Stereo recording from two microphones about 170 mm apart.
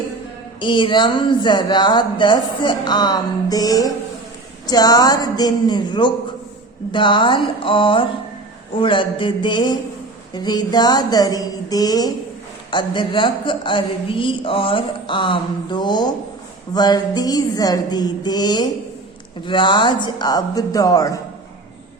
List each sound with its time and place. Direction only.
0.6 s speech: 30° left (ahead or behind)